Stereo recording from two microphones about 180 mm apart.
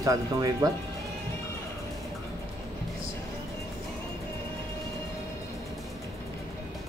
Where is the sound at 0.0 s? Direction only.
20° right (ahead or behind).